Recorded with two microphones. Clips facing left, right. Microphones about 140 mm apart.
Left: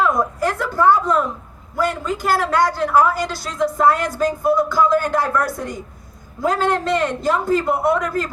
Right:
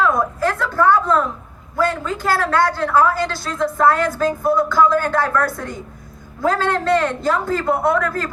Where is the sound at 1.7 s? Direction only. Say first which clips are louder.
Right 1 dB; 15° left (ahead or behind).